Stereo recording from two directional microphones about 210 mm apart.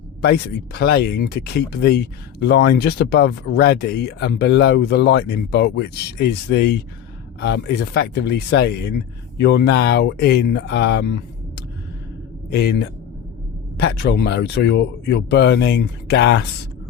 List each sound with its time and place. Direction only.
0.3 s speech: 50° left (ahead or behind)
13.7 s speech: 50° left (ahead or behind)